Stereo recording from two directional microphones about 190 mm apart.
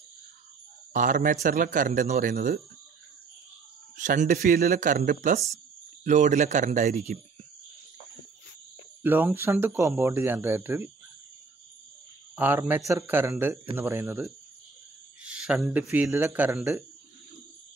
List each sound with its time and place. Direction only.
0.9 s speech: 45° right (ahead or behind)
3.9 s a man's voice: 40° right (ahead or behind)
9.0 s speech: 10° right (ahead or behind)
12.4 s speech: 10° right (ahead or behind)